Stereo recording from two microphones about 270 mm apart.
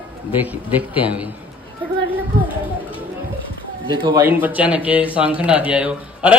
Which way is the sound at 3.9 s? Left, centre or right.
Centre.